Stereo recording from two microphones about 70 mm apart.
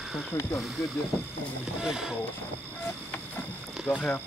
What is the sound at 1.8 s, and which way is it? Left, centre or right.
Speech, centre.